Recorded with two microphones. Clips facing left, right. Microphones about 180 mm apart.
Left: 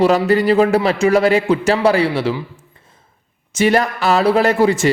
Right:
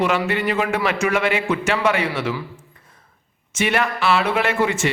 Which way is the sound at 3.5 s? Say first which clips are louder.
Left 6 dB; 35° left (ahead or behind).